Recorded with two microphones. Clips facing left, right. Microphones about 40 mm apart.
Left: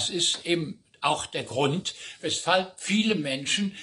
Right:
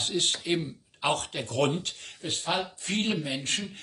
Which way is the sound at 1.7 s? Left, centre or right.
Left.